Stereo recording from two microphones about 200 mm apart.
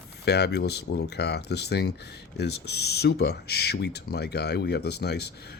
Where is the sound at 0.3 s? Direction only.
55° left (ahead or behind).